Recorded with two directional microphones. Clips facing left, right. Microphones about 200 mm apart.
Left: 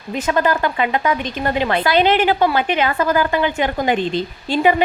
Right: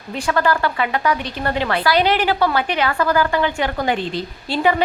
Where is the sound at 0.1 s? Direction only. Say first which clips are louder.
Left 1 dB; 20° left (ahead or behind).